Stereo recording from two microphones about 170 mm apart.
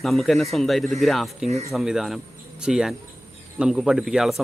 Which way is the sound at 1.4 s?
40° right (ahead or behind).